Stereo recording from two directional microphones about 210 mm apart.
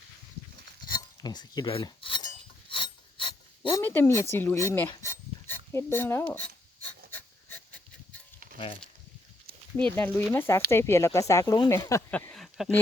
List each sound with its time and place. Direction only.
1.2 s speech: 20° left (ahead or behind)
2.6 s mechanisms: 25° left (ahead or behind)
3.8 s speech: 10° left (ahead or behind)
5.0 s a sound: 10° left (ahead or behind)
8.5 s speech: 25° left (ahead or behind)
9.9 s speech: 10° left (ahead or behind)